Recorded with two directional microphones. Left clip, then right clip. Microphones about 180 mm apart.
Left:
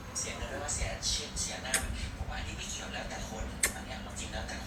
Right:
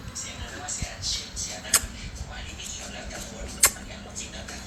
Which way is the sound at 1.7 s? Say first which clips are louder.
Right 9 dB; 55° right (ahead or behind).